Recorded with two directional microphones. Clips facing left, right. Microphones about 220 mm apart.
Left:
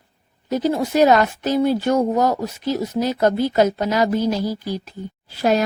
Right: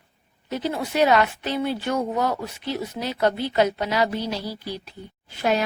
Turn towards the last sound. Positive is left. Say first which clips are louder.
# left 5 dB
turn(degrees=40)  # may be behind; listen again after turning